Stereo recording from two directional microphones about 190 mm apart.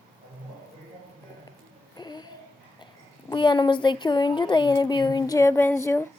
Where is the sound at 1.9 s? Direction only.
20° left (ahead or behind).